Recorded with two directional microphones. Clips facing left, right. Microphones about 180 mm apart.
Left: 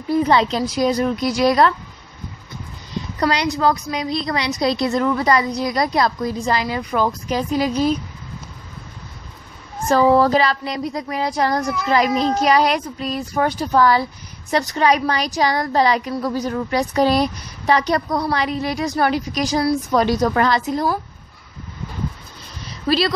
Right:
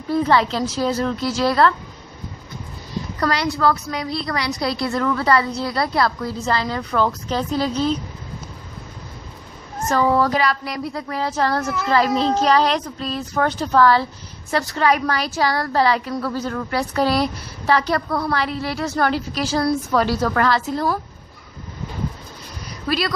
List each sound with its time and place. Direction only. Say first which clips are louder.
0.1 s a woman's voice: left 1 dB; 20° left (ahead or behind)
3.2 s a woman's voice: left 2 dB; 20° left (ahead or behind)
9.8 s a woman's voice: left 4 dB; 30° left (ahead or behind); by 20.8 s 15° left (ahead or behind)
22.7 s a sound: left 4 dB; 25° left (ahead or behind)